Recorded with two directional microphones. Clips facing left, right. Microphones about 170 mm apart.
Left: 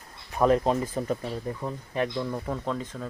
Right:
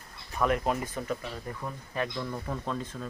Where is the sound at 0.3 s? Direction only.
35° left (ahead or behind).